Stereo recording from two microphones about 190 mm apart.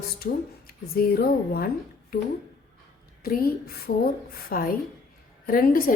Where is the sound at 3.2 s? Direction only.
50° left (ahead or behind).